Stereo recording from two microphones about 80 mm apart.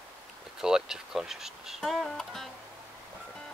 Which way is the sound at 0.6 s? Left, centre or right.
Centre.